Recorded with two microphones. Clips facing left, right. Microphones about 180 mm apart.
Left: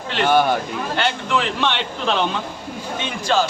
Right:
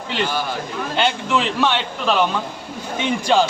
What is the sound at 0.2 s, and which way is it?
Speech, 60° left (ahead or behind).